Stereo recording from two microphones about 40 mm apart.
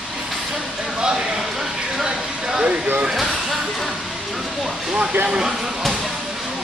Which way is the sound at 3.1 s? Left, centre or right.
Centre.